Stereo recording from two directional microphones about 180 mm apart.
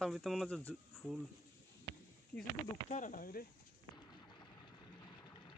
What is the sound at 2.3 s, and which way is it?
Speech, 10° left (ahead or behind).